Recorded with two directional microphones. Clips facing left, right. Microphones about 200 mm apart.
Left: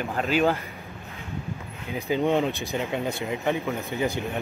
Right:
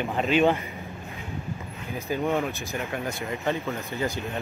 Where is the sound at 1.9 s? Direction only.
15° left (ahead or behind).